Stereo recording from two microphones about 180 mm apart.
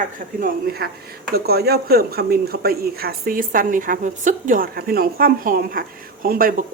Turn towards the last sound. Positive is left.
turn(degrees=-50)  # may be behind; listen again after turning